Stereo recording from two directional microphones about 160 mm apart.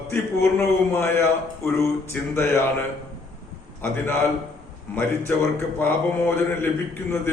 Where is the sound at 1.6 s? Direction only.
15° left (ahead or behind).